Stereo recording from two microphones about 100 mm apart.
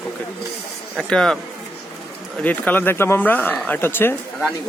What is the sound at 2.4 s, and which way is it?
Speech, 15° left (ahead or behind).